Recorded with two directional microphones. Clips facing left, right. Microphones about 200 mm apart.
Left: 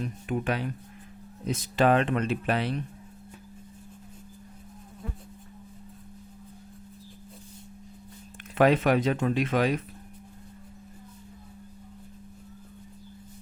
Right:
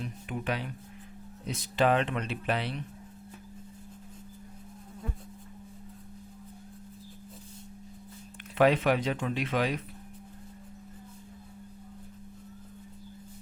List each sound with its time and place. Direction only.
0.0 s speech: 50° left (ahead or behind)
8.5 s speech: 45° left (ahead or behind)